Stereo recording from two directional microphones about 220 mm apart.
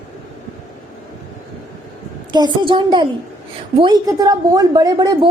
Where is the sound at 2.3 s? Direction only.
20° right (ahead or behind).